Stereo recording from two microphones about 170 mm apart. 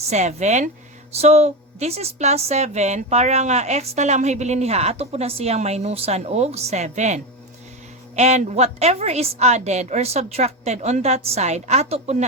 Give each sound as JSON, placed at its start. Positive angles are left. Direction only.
{"t": 0.1, "sound": "a woman's voice", "side_deg": -45}